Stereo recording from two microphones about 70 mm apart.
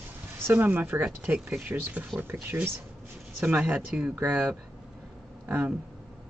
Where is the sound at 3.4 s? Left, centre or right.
Right.